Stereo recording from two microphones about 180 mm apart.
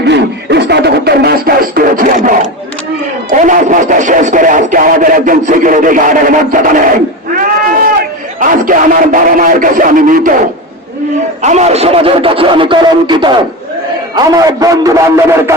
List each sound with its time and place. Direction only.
0.0 s music: 70° right (ahead or behind); by 2.4 s 50° right (ahead or behind)
3.4 s radio: 45° right (ahead or behind)
8.4 s a sound: 50° right (ahead or behind)
11.4 s a man's voice: 40° right (ahead or behind); by 15.5 s 15° right (ahead or behind)